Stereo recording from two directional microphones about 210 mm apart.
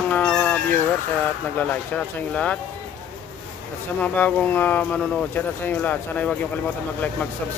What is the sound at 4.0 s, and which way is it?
Speech, 5° left (ahead or behind).